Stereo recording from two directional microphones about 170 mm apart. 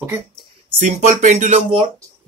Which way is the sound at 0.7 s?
45° right (ahead or behind).